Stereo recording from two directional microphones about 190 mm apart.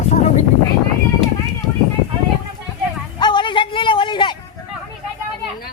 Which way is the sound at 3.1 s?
25° left (ahead or behind).